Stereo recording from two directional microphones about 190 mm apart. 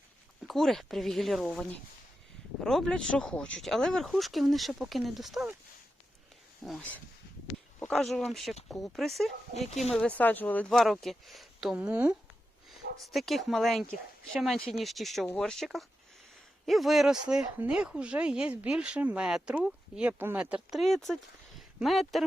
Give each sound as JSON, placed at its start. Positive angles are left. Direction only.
{"t": 0.4, "sound": "speech", "side_deg": 0}
{"t": 2.6, "sound": "speech", "side_deg": 0}
{"t": 6.7, "sound": "speech", "side_deg": 5}
{"t": 9.6, "sound": "speech", "side_deg": 35}
{"t": 9.9, "sound": "speech", "side_deg": 5}